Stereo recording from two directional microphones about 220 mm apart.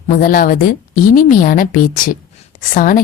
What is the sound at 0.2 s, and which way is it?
A woman's voice, 40° left (ahead or behind).